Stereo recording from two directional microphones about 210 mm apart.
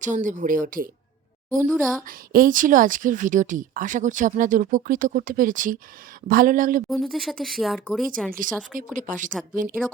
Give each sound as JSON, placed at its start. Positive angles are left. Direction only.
{"t": 0.0, "sound": "a woman's voice", "side_deg": -35}
{"t": 1.6, "sound": "speech", "side_deg": 5}
{"t": 2.0, "sound": "a woman's voice", "side_deg": -40}
{"t": 6.9, "sound": "speech", "side_deg": 0}
{"t": 8.7, "sound": "a woman's voice", "side_deg": -40}